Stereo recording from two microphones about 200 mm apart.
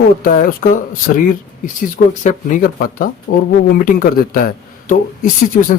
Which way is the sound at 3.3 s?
90° left.